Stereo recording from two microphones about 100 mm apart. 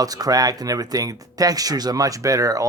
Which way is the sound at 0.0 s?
40° right (ahead or behind).